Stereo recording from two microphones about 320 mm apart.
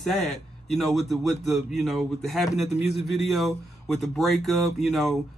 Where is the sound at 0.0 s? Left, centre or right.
Centre.